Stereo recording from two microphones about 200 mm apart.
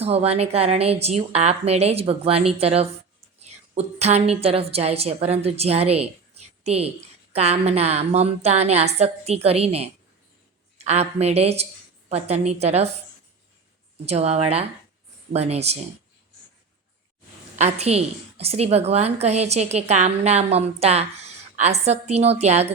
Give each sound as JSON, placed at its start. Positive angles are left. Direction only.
{"t": 0.0, "sound": "a woman's voice", "side_deg": -30}
{"t": 14.0, "sound": "a woman's voice", "side_deg": -30}
{"t": 17.6, "sound": "a woman's voice", "side_deg": -30}